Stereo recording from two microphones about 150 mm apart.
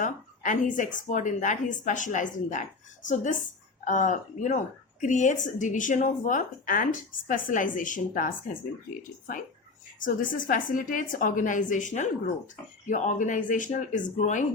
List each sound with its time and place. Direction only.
0.0 s a woman's voice: 55° left (ahead or behind)
3.8 s speech: 55° left (ahead or behind)